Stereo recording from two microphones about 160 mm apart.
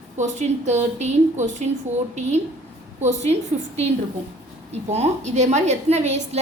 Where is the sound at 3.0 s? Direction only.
45° right (ahead or behind).